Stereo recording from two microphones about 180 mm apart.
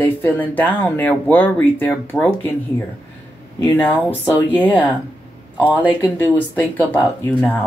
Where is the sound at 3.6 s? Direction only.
10° left (ahead or behind).